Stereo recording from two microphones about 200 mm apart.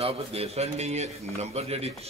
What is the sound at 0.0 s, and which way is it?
A man's voice, 30° right (ahead or behind).